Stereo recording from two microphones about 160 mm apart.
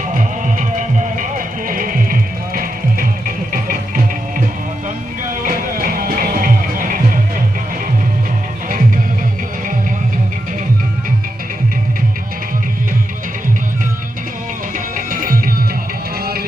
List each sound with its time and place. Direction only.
0.1 s music: 50° right (ahead or behind)
14.9 s music: 60° right (ahead or behind)
16.2 s music: 75° right (ahead or behind)